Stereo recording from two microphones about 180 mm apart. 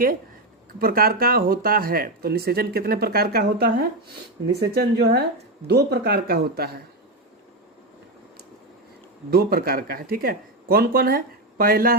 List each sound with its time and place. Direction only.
0.8 s speech: 55° right (ahead or behind)
9.3 s speech: 60° right (ahead or behind)